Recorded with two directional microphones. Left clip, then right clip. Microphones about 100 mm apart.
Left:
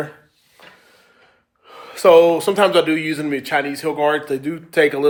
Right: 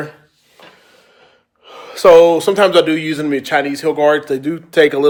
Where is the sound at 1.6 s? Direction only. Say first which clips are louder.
Right 5 dB; 30° right (ahead or behind).